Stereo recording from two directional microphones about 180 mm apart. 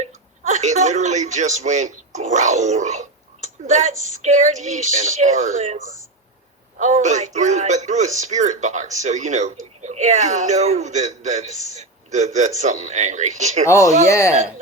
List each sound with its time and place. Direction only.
0.0 s a man's voice: 40° right (ahead or behind)
13.7 s speech: 15° left (ahead or behind)